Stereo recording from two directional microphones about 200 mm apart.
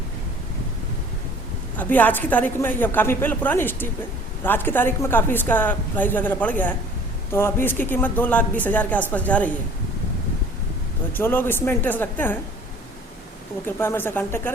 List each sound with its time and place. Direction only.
1.8 s a woman's voice: 10° left (ahead or behind)
11.1 s a woman's voice: 10° left (ahead or behind)
13.7 s a woman's voice: 10° left (ahead or behind)